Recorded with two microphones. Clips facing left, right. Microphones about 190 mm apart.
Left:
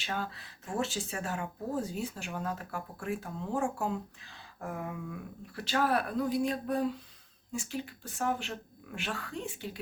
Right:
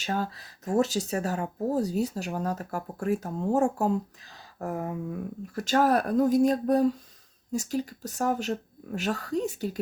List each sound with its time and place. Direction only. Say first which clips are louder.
0.0 s speech: right 6 dB; 40° right (ahead or behind)